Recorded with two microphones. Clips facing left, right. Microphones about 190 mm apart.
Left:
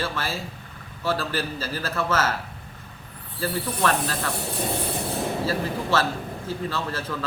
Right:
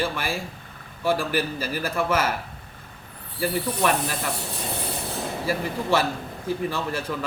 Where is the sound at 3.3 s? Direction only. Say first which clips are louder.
Right 2 dB; 15° right (ahead or behind).